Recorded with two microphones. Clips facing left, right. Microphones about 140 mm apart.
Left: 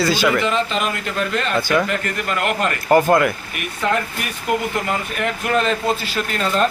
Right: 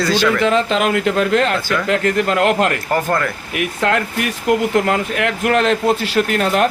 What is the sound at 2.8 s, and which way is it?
Speech, 15° left (ahead or behind).